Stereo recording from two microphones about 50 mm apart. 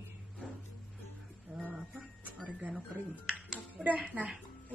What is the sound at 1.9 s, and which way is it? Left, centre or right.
Speech, right.